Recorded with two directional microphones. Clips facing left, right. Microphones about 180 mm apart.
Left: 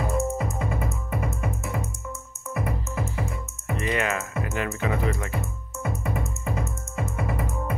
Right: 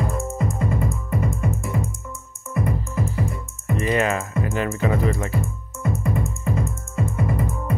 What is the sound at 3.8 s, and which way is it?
Music, 35° right (ahead or behind).